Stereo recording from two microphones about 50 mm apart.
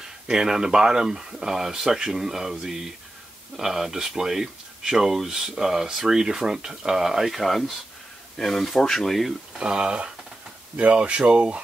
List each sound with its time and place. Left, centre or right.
0.3 s speech: centre
9.6 s speech: centre